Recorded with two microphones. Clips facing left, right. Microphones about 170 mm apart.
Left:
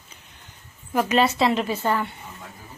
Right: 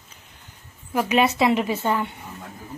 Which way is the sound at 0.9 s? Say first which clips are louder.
Even; 10° right (ahead or behind).